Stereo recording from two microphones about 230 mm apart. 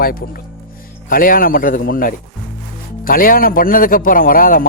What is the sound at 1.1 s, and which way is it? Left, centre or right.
A man's voice, left.